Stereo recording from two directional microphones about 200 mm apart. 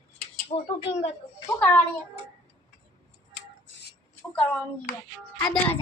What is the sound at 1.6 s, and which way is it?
Speech, 10° left (ahead or behind).